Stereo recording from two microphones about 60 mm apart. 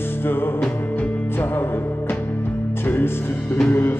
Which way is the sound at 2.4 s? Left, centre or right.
Left.